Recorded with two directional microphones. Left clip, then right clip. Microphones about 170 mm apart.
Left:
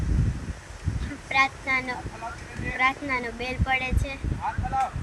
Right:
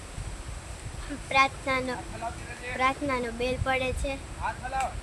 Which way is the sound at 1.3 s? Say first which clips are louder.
Left 1 dB; 25° right (ahead or behind).